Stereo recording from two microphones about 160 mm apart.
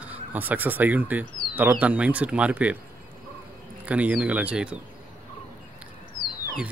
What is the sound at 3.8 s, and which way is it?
Speech, 10° right (ahead or behind).